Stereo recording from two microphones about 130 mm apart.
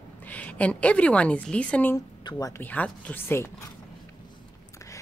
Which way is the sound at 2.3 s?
30° left (ahead or behind).